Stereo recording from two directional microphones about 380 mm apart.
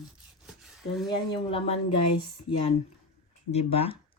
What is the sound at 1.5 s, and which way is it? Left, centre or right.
Speech, centre.